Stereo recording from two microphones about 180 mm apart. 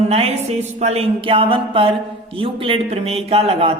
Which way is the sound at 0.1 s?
35° right (ahead or behind).